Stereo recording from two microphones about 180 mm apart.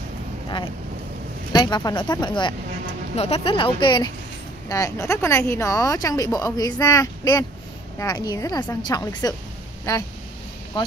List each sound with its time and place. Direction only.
1.5 s speech: 25° left (ahead or behind)